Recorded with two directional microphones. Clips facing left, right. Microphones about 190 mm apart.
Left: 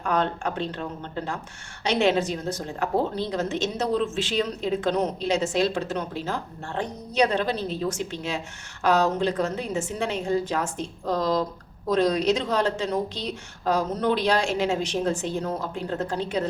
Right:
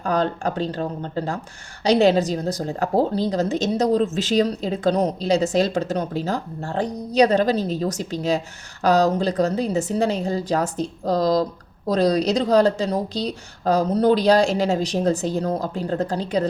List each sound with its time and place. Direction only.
0.0 s a woman's voice: 35° right (ahead or behind)